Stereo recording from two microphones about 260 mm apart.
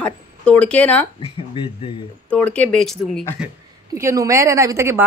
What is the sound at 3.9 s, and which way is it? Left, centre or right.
A woman's voice, centre.